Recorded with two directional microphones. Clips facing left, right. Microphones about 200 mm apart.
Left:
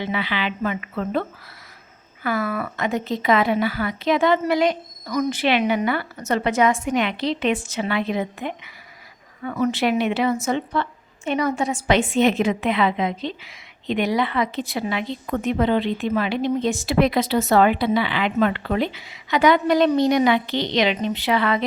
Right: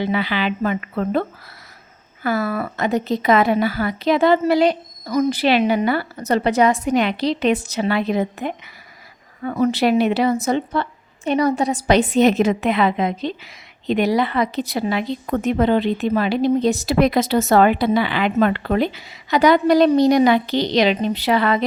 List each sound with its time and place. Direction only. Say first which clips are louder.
0.0 s speech: right 4 dB; 40° right (ahead or behind)
2.2 s speech: right 3 dB; 35° right (ahead or behind)